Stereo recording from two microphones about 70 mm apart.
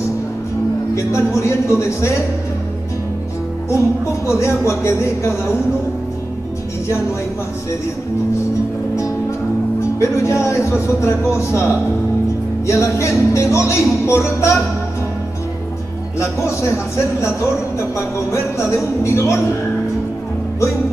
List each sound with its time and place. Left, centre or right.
0.9 s music: left
3.7 s music: left
9.9 s speech: left
12.6 s music: left
16.2 s speech: left
17.9 s music: left